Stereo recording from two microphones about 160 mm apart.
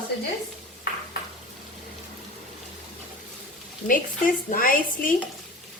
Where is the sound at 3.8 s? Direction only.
60° left (ahead or behind).